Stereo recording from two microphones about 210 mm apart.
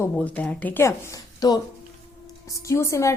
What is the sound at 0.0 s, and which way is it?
A woman's voice, 5° left (ahead or behind).